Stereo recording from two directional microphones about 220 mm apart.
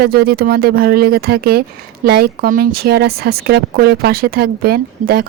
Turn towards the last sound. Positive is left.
turn(degrees=-45)  # may be behind; listen again after turning